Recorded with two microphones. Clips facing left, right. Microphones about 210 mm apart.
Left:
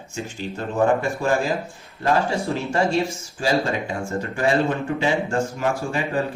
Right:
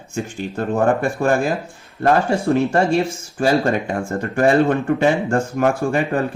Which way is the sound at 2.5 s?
55° right (ahead or behind).